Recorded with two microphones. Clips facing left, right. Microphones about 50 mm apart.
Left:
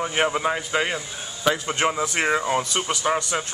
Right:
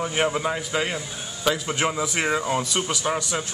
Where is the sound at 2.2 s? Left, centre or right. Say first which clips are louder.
Left 2 dB; centre.